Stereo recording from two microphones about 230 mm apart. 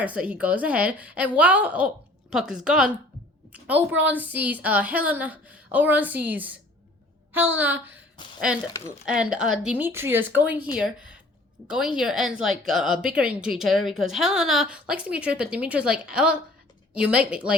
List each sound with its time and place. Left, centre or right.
0.0 s a woman's voice: centre
8.2 s speech: centre
9.0 s a woman's voice: centre